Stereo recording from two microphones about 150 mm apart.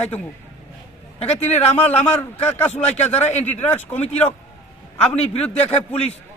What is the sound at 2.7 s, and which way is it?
Speech, 50° left (ahead or behind).